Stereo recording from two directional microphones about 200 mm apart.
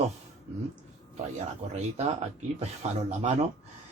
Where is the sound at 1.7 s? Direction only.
35° right (ahead or behind).